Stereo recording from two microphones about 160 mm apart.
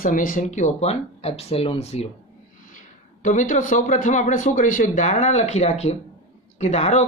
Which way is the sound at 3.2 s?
50° left (ahead or behind).